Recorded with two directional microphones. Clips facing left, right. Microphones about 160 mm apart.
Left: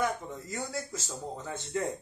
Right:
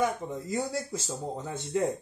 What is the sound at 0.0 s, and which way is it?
Speech, 15° right (ahead or behind).